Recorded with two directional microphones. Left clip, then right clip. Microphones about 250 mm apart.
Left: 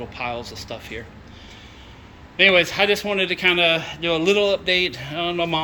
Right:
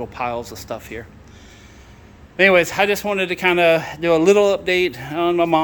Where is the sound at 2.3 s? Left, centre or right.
Centre.